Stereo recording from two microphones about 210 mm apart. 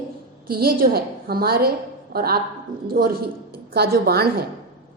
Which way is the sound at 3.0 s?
65° right (ahead or behind).